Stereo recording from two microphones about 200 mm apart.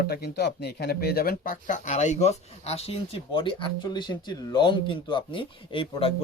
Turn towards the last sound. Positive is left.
turn(degrees=25)  # may be behind; listen again after turning